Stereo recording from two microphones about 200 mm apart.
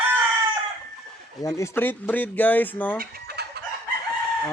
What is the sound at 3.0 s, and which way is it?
Chicken, 50° right (ahead or behind).